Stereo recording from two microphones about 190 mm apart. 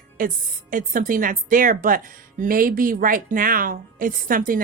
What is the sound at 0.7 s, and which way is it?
A woman's voice, 45° right (ahead or behind).